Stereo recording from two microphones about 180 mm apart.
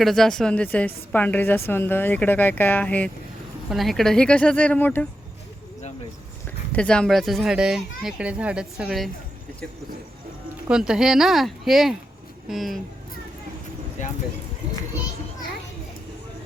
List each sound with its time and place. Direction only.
0.0 s a woman's voice: centre (ahead or behind)
6.7 s speech: 5° left (ahead or behind)
10.7 s speech: 5° right (ahead or behind)
14.0 s speech: 45° left (ahead or behind)